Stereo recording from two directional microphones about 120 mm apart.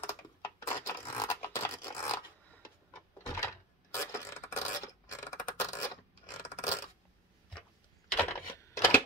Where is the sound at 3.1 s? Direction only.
25° left (ahead or behind).